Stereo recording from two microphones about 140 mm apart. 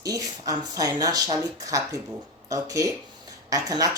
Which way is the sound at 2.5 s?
25° right (ahead or behind).